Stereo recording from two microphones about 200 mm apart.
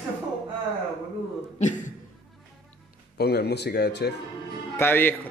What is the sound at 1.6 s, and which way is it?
Speech, 40° left (ahead or behind).